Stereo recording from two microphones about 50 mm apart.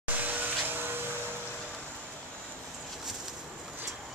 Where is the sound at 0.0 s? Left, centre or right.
Right.